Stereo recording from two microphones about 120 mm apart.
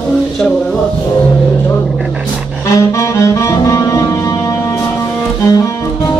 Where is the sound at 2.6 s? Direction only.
25° left (ahead or behind).